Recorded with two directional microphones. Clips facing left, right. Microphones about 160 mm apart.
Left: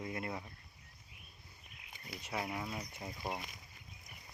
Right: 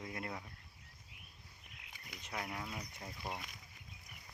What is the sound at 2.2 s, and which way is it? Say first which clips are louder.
Speech: left 4 dB; 5° left (ahead or behind).